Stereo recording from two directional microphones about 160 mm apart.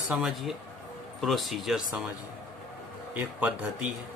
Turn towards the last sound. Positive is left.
turn(degrees=-10)  # may be behind; listen again after turning